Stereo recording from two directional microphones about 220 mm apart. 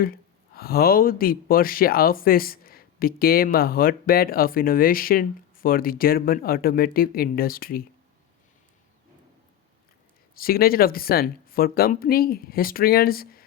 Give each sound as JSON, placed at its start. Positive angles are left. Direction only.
{"t": 0.0, "sound": "speech", "side_deg": 40}
{"t": 10.3, "sound": "speech", "side_deg": 40}